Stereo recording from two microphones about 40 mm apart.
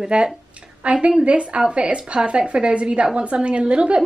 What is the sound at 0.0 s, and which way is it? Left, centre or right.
A woman's voice, right.